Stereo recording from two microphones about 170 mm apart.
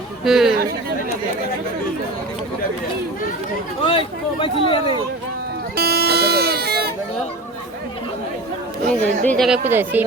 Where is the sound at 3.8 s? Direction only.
30° left (ahead or behind).